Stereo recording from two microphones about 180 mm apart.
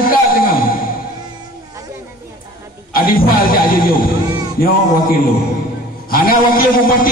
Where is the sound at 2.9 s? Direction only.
55° left (ahead or behind).